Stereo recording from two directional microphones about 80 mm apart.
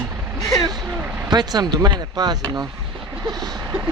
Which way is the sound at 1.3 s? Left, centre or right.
Right.